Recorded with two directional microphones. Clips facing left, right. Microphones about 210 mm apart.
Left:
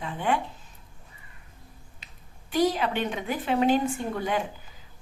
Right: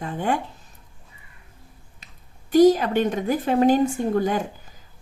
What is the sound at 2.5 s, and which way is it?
A woman's voice, 45° right (ahead or behind).